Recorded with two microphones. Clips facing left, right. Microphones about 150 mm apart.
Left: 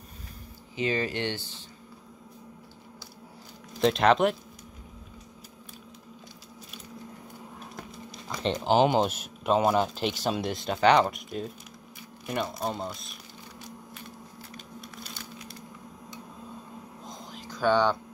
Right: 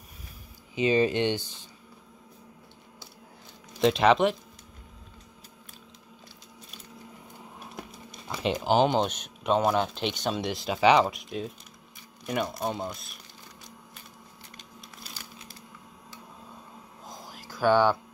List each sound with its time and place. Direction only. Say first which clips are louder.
0.7 s speech: right 5 dB; 20° right (ahead or behind)
3.8 s speech: right 1 dB; centre (ahead or behind)
8.3 s speech: even; 5° right (ahead or behind)
17.0 s a sound: right 1 dB; 5° right (ahead or behind)